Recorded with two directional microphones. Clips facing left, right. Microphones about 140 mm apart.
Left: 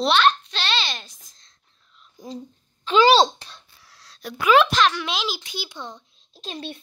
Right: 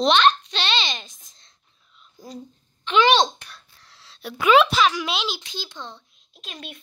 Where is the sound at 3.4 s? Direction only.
25° left (ahead or behind).